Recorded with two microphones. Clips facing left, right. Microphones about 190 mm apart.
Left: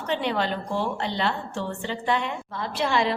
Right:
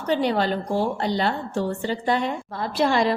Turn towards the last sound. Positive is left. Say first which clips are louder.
# right 4 dB
turn(degrees=-40)  # may be behind; listen again after turning